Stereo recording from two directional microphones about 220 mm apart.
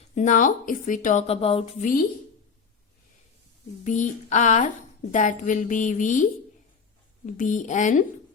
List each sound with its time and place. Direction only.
0.2 s a woman's voice: 35° left (ahead or behind)
3.8 s a woman's voice: 35° left (ahead or behind)